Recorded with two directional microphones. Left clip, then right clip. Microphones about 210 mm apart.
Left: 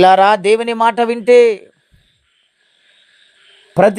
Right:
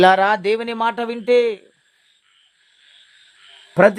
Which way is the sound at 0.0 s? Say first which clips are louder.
Left 5 dB; 25° left (ahead or behind).